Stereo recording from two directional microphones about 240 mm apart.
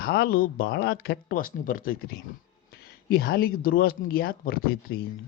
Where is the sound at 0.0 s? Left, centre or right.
Left.